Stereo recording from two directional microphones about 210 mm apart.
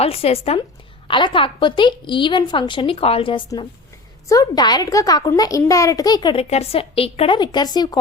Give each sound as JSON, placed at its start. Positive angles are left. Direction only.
{"t": 0.0, "sound": "a child's voice", "side_deg": 30}